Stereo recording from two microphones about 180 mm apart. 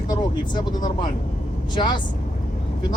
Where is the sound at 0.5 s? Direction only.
25° left (ahead or behind).